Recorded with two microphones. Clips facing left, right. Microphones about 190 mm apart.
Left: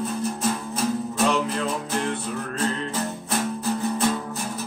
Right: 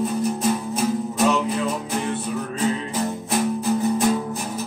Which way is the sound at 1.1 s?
5° right (ahead or behind).